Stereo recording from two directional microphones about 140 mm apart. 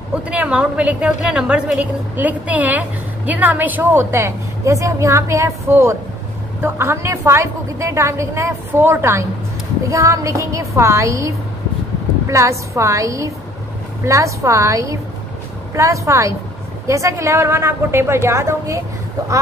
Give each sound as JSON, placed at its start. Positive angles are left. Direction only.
{"t": 0.1, "sound": "a woman's voice", "side_deg": -10}